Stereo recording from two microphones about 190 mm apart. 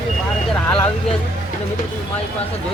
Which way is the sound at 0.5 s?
5° left (ahead or behind).